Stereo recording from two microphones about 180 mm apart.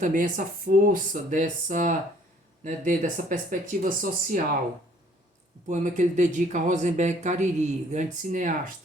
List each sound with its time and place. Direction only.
0.0 s speech: 50° right (ahead or behind)
5.6 s speech: 45° right (ahead or behind)